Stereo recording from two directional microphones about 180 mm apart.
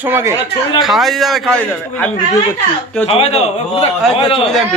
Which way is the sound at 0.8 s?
Centre (ahead or behind).